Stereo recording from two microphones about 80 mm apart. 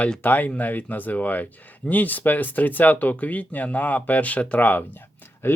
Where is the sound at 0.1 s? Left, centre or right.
Centre.